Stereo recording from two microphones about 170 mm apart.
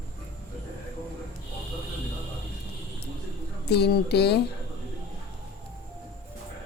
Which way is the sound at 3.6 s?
75° left (ahead or behind).